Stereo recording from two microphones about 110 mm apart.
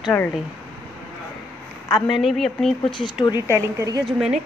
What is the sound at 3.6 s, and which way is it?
Speech, 30° right (ahead or behind).